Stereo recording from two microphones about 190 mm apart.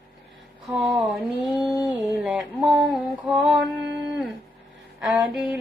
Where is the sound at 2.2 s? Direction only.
5° right (ahead or behind).